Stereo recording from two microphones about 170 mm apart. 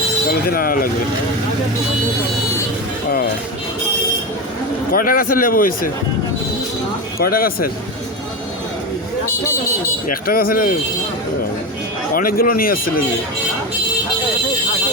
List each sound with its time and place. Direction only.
0.5 s speech: 55° left (ahead or behind)
4.9 s speech: 55° left (ahead or behind)
7.2 s speech: 60° left (ahead or behind)
10.1 s speech: 60° left (ahead or behind)
12.1 s speech: 60° left (ahead or behind)